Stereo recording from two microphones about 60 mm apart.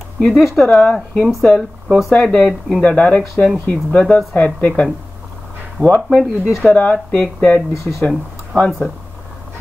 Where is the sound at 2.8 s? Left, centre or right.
Centre.